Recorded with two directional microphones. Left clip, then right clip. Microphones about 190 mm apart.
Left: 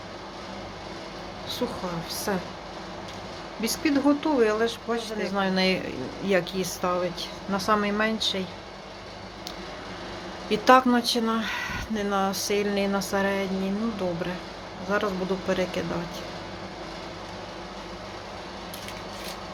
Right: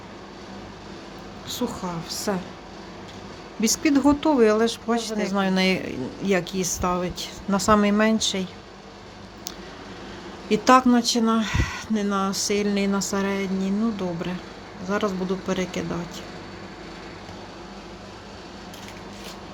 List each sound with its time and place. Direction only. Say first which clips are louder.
1.5 s speech: right 1 dB; 55° right (ahead or behind)
3.6 s speech: right 4 dB; 55° right (ahead or behind)
10.5 s speech: right 1 dB; 55° right (ahead or behind)
14.8 s speech: right 1 dB; 55° right (ahead or behind)